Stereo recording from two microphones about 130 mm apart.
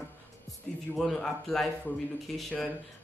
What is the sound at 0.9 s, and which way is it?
Speech, 5° left (ahead or behind).